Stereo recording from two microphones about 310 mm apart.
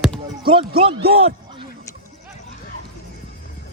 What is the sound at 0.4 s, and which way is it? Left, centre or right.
A man's voice, centre.